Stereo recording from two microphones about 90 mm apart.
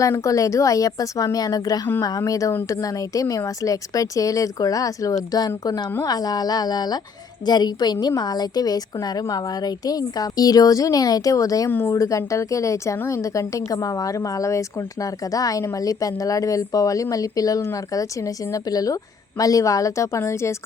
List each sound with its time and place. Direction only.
0.0 s a woman's voice: 40° left (ahead or behind)
11.7 s speech: 25° left (ahead or behind)
11.9 s speech: 35° left (ahead or behind)